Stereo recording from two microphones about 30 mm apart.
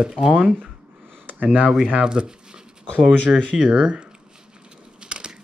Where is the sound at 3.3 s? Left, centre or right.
Right.